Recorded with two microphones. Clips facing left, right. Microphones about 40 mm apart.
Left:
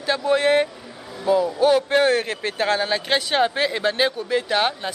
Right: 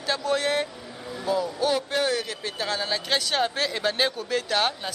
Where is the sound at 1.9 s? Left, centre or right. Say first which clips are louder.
Left 7 dB; left; by 4.9 s centre.